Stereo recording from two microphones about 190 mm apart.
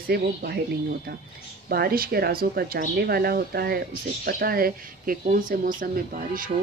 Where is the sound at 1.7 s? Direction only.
50° right (ahead or behind).